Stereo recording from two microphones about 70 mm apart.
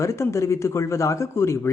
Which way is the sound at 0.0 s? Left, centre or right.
Left.